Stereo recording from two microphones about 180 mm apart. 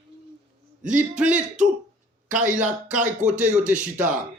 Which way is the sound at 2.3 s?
45° right (ahead or behind).